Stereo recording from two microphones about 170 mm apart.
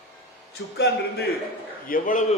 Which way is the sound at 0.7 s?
80° left.